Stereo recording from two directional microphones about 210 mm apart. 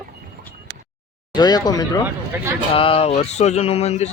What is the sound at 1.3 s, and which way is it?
Speech, 20° left (ahead or behind).